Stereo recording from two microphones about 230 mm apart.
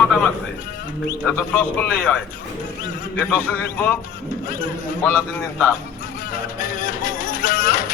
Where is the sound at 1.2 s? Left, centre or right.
Centre.